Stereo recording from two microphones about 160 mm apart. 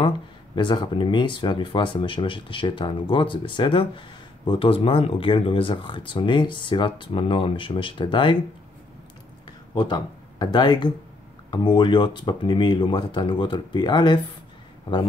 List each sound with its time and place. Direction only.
0.6 s speech: 30° left (ahead or behind)
9.8 s speech: 30° left (ahead or behind)